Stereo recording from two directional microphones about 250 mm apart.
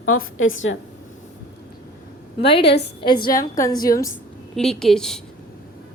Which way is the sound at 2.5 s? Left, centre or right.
Left.